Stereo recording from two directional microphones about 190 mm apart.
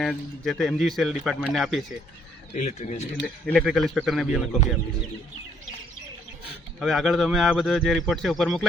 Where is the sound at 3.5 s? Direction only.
Centre (ahead or behind).